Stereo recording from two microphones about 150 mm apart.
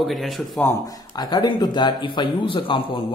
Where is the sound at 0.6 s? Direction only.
20° left (ahead or behind).